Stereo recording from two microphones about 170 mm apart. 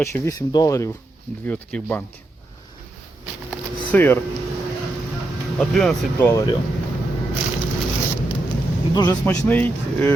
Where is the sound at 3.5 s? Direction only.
10° left (ahead or behind).